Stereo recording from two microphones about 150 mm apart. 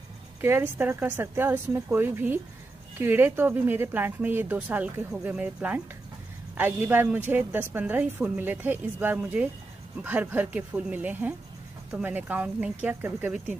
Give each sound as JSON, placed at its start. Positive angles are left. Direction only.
{"t": 0.4, "sound": "a woman's voice", "side_deg": -15}